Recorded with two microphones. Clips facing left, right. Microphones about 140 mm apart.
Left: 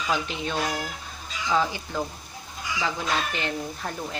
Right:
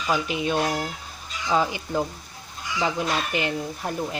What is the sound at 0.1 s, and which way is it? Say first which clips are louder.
Speech: right 5 dB; 15° right (ahead or behind).